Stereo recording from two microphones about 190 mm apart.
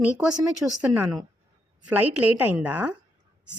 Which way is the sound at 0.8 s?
5° right (ahead or behind).